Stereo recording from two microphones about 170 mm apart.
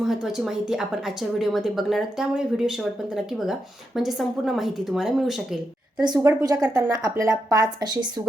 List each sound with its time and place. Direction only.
0.0 s speech: centre (ahead or behind)
6.0 s speech: 25° right (ahead or behind)